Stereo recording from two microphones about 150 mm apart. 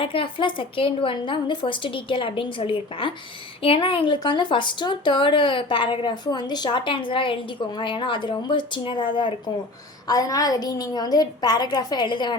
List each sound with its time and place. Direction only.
0.0 s a woman's voice: 35° left (ahead or behind)